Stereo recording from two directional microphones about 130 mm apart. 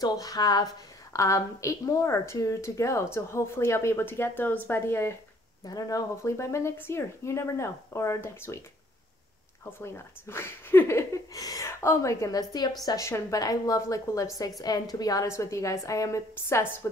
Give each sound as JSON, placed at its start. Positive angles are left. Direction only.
{"t": 0.0, "sound": "speech", "side_deg": 30}
{"t": 9.8, "sound": "speech", "side_deg": 20}